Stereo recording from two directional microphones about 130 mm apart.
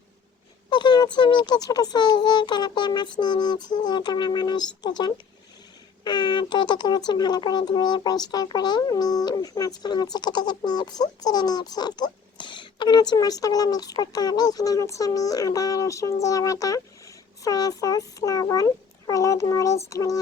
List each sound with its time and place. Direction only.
0.7 s a child's voice: 35° left (ahead or behind)